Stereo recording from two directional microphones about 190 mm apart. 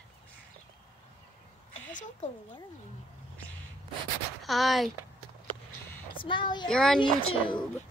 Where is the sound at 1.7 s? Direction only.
40° left (ahead or behind).